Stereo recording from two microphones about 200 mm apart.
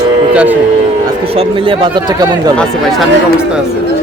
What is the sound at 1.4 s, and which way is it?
Speech, 25° right (ahead or behind).